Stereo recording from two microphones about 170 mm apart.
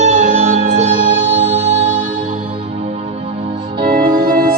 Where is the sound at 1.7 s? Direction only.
45° right (ahead or behind).